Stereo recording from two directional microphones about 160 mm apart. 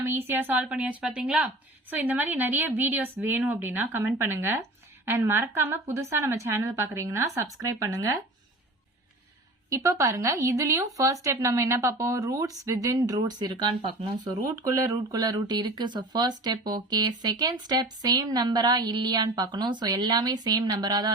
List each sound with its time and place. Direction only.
0.0 s a woman's voice: 15° right (ahead or behind)
9.6 s speech: 20° right (ahead or behind)